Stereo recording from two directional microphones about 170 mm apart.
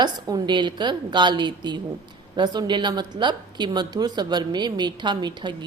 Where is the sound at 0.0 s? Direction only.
25° right (ahead or behind).